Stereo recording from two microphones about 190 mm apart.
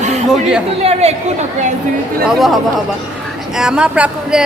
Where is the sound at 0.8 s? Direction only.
35° right (ahead or behind).